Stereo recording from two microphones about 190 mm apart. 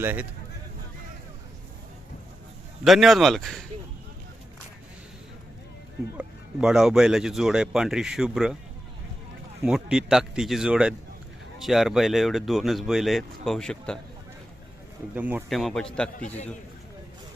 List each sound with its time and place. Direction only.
0.0 s speech: 10° right (ahead or behind)
2.8 s speech: centre (ahead or behind)
6.1 s speech: 5° right (ahead or behind)
9.6 s speech: 5° right (ahead or behind)
15.1 s speech: 10° right (ahead or behind)
15.4 s speech: centre (ahead or behind)
16.1 s a man's voice: 40° left (ahead or behind)